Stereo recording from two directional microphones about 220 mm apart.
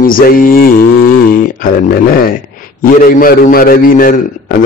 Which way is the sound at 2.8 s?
40° left (ahead or behind).